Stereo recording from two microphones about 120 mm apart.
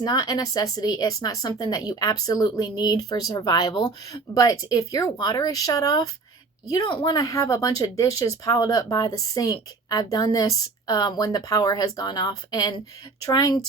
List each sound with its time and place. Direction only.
0.0 s a woman's voice: 35° left (ahead or behind)